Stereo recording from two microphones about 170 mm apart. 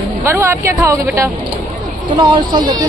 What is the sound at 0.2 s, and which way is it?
A woman's voice, 15° right (ahead or behind).